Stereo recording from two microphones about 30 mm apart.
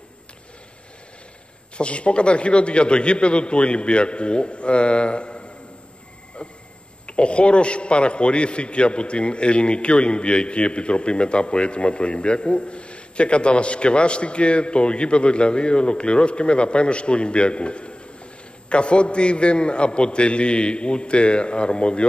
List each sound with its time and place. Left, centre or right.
1.8 s a man's voice: left
7.1 s a man's voice: left